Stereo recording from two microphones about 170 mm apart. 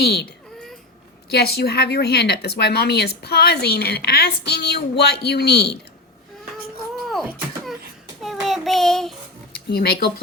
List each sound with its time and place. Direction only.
0.0 s speech: 70° left (ahead or behind)
1.3 s speech: 70° left (ahead or behind)
8.2 s child singing: centre (ahead or behind)
9.6 s speech: 70° left (ahead or behind)